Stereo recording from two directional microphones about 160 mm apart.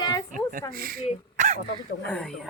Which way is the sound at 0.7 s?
65° right (ahead or behind).